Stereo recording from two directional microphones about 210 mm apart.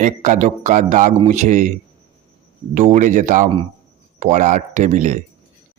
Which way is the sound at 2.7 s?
35° right (ahead or behind).